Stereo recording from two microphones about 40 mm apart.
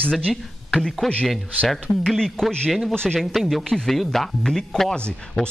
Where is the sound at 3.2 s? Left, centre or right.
Centre.